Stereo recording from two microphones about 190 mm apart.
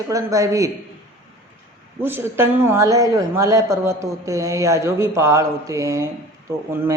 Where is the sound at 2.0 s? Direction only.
10° right (ahead or behind).